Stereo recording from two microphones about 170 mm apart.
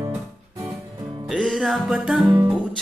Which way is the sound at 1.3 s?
Centre (ahead or behind).